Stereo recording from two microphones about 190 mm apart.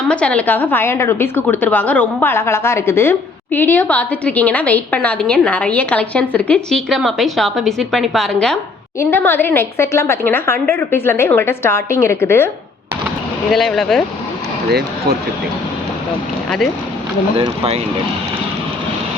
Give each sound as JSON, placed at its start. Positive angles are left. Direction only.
{"t": 0.1, "sound": "a woman's voice", "side_deg": 5}
{"t": 13.5, "sound": "speech", "side_deg": 0}
{"t": 14.7, "sound": "speech", "side_deg": -55}
{"t": 17.3, "sound": "speech", "side_deg": -30}